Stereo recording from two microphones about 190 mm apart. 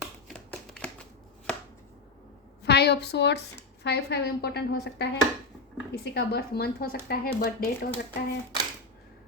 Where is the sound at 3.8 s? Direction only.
60° left (ahead or behind).